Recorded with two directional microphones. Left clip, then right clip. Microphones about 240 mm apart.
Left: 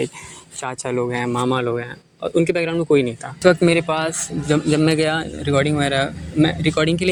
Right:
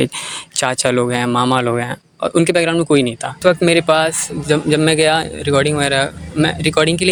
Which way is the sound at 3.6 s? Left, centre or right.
Right.